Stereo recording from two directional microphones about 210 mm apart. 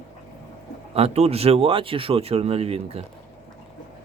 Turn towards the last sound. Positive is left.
turn(degrees=-30)  # may be behind; listen again after turning